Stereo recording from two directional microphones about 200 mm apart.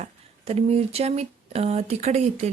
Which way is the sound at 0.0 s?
30° right (ahead or behind).